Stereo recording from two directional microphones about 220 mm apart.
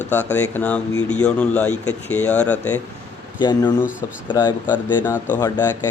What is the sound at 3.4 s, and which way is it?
Speech, 20° left (ahead or behind).